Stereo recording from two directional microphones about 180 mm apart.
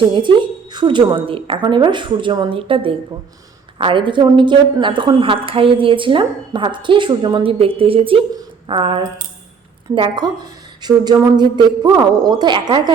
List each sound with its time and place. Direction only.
0.1 s a woman's voice: 25° right (ahead or behind)